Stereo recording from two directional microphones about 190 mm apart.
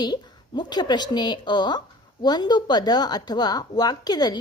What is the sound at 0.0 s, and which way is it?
A woman's voice, 20° left (ahead or behind).